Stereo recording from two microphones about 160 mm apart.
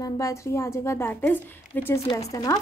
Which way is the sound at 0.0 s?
20° left (ahead or behind).